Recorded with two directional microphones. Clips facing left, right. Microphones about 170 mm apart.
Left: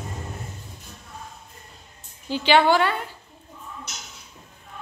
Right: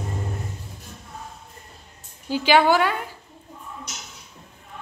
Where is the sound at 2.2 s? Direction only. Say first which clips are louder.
Right 1 dB; 10° right (ahead or behind).